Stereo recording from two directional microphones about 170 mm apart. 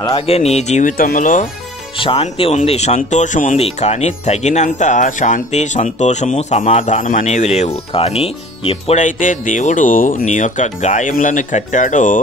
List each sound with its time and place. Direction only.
0.2 s speech: 35° left (ahead or behind)
2.0 s speech: 30° left (ahead or behind); by 12.2 s 50° left (ahead or behind)